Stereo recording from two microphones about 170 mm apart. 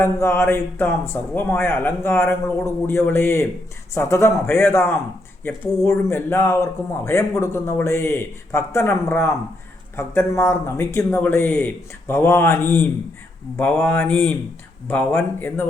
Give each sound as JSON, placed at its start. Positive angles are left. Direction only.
{"t": 0.0, "sound": "a man's voice", "side_deg": 15}